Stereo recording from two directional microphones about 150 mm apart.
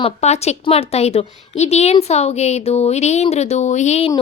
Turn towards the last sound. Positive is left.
turn(degrees=45)  # may be behind; listen again after turning